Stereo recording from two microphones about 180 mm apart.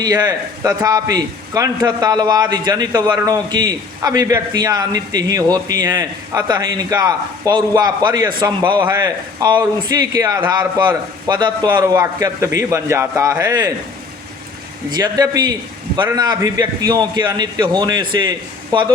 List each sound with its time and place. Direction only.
0.0 s a man's voice: 20° right (ahead or behind)
14.8 s a man's voice: 20° right (ahead or behind)